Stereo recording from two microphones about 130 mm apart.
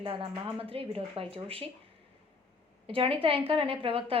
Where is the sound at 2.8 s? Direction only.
45° right (ahead or behind).